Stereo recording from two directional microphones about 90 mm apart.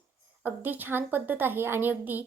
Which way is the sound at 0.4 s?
20° right (ahead or behind).